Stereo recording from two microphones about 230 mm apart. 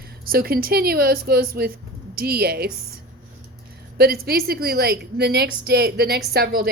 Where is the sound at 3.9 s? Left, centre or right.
Right.